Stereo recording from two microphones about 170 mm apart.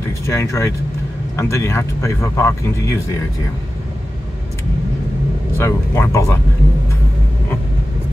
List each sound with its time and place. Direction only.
0.3 s speech: 15° left (ahead or behind)
5.6 s speech: 15° left (ahead or behind)